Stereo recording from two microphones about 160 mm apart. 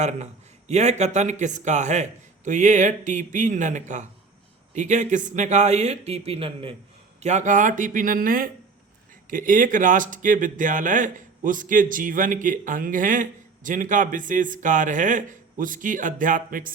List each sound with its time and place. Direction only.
0.0 s a man's voice: 45° right (ahead or behind)
7.2 s speech: 45° right (ahead or behind)